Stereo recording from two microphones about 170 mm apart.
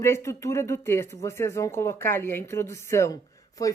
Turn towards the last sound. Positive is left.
turn(degrees=20)  # may be behind; listen again after turning